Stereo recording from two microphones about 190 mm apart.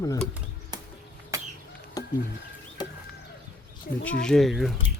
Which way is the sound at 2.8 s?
20° left (ahead or behind).